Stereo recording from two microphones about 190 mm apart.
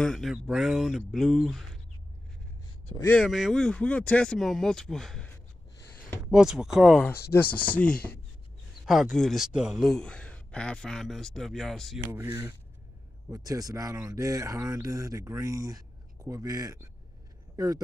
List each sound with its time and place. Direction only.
0.0 s a man's voice: centre (ahead or behind)
3.2 s a man's voice: centre (ahead or behind)
6.3 s a man's voice: 5° right (ahead or behind)
12.1 s speech: 15° right (ahead or behind)